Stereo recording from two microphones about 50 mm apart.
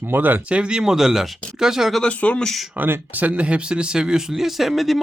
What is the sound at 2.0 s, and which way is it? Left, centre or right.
Speech, left.